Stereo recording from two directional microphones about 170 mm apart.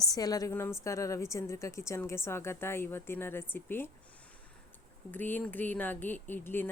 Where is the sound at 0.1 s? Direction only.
20° left (ahead or behind).